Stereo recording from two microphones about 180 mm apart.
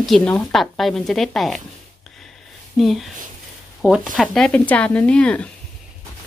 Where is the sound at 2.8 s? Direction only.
Centre (ahead or behind).